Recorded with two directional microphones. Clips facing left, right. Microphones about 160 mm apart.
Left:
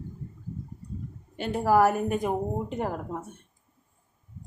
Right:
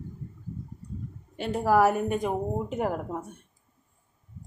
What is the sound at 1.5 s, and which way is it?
Speech, centre (ahead or behind).